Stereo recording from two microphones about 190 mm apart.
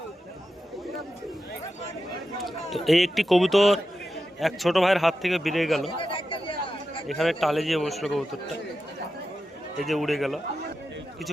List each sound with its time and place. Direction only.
2.4 s a man's voice: centre (ahead or behind)
6.0 s chatter: 25° left (ahead or behind)
7.1 s a man's voice: centre (ahead or behind)
9.7 s a man's voice: centre (ahead or behind)